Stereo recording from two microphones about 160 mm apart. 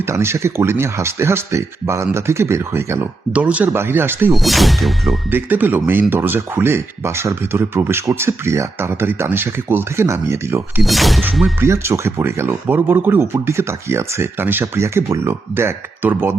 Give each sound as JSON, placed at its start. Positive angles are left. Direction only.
{"t": 0.1, "sound": "speech", "side_deg": -15}
{"t": 4.3, "sound": "speech", "side_deg": 0}
{"t": 5.3, "sound": "speech", "side_deg": -10}
{"t": 10.8, "sound": "speech", "side_deg": 0}
{"t": 11.6, "sound": "speech", "side_deg": -15}